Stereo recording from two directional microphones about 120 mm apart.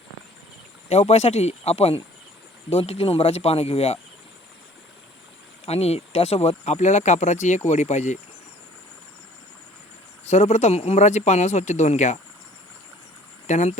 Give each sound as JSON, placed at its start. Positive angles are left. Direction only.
{"t": 0.9, "sound": "speech", "side_deg": 65}
{"t": 5.6, "sound": "speech", "side_deg": 60}
{"t": 10.2, "sound": "speech", "side_deg": 65}
{"t": 13.5, "sound": "speech", "side_deg": 75}